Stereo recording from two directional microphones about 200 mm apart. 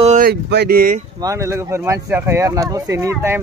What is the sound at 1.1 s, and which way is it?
Speech, 15° right (ahead or behind).